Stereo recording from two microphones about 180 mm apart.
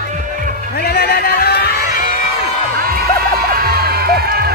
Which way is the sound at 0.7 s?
60° left (ahead or behind).